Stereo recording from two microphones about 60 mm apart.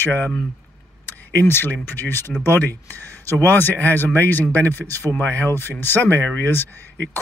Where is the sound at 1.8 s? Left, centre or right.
Left.